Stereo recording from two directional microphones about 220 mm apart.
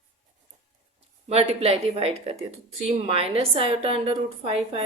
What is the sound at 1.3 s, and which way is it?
A woman's voice, 30° right (ahead or behind).